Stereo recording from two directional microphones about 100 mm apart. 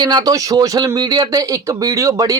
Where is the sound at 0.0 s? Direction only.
40° right (ahead or behind).